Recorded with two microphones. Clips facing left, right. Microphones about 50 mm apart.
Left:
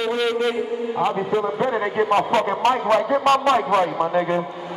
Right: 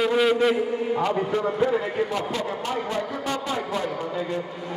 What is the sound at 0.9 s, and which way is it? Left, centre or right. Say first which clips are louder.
Speech: left 4 dB; centre.